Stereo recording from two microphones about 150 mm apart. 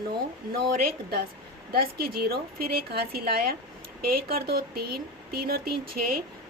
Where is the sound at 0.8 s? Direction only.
90° right.